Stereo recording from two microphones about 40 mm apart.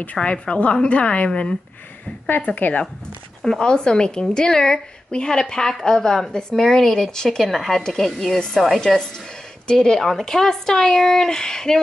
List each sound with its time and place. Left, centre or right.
0.0 s a woman's voice: left
2.2 s a woman's voice: left
3.5 s a woman's voice: left; by 8.8 s centre
8.8 s a woman's voice: centre